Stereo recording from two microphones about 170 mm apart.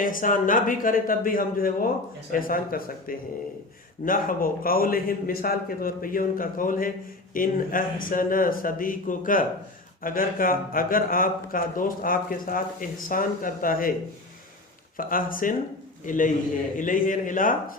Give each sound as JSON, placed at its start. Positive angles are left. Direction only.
{"t": 0.0, "sound": "speech", "side_deg": 55}
{"t": 14.9, "sound": "speech", "side_deg": 55}